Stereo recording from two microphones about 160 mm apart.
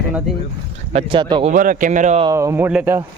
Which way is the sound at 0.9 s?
30° right (ahead or behind).